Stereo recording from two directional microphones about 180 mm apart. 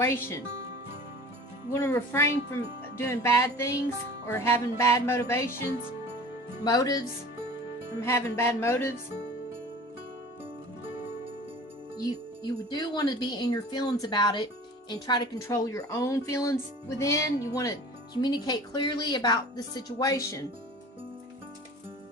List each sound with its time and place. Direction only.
0.0 s speech: 15° left (ahead or behind)
1.7 s speech: 15° left (ahead or behind)
6.7 s speech: 20° left (ahead or behind)
8.0 s speech: 15° left (ahead or behind)
11.9 s speech: 20° left (ahead or behind)